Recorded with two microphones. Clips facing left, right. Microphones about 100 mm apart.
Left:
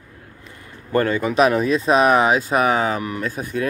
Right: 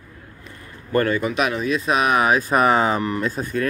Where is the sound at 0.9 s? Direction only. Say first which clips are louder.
Left 2 dB; 25° left (ahead or behind).